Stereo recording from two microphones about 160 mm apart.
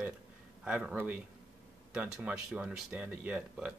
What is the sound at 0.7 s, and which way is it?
Speech, 10° right (ahead or behind).